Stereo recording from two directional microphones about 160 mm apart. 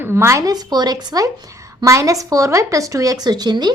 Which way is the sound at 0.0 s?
15° right (ahead or behind).